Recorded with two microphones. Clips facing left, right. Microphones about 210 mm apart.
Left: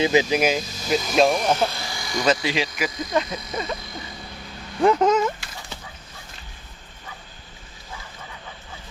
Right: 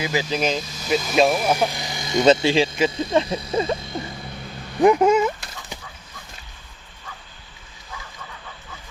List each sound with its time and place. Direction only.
0.0 s speech: 20° left (ahead or behind); by 3.8 s 30° right (ahead or behind)
4.8 s dog: 10° right (ahead or behind)